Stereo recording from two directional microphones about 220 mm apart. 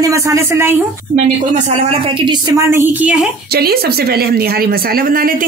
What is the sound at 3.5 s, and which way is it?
Speech, 45° right (ahead or behind).